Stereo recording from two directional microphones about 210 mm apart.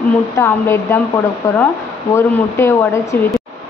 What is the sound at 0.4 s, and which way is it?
Speech, 10° left (ahead or behind).